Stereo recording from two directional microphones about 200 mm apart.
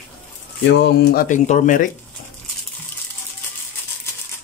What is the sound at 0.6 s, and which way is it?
Speech, 60° left (ahead or behind).